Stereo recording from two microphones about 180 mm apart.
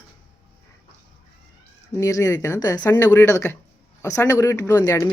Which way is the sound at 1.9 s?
15° left (ahead or behind).